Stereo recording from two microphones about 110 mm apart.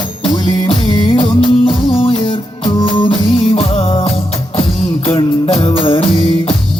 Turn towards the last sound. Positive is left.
turn(degrees=55)  # may be behind; listen again after turning